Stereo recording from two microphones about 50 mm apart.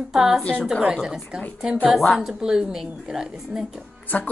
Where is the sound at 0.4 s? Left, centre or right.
Left.